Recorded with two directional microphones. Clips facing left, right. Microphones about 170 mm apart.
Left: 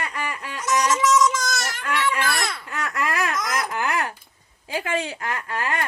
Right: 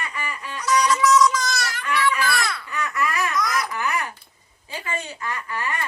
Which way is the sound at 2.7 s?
90° left.